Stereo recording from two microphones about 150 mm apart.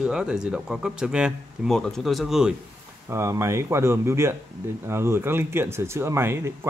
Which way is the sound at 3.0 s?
20° right (ahead or behind).